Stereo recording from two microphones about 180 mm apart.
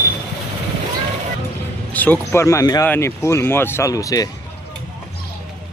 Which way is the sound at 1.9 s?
10° left (ahead or behind).